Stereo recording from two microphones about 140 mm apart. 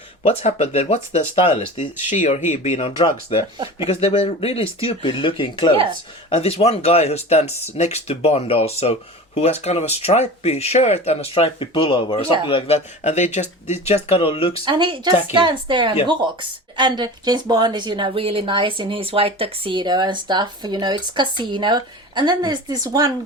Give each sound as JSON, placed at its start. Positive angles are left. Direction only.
{"t": 0.2, "sound": "speech", "side_deg": 50}
{"t": 6.3, "sound": "speech", "side_deg": 45}
{"t": 14.6, "sound": "speech", "side_deg": -35}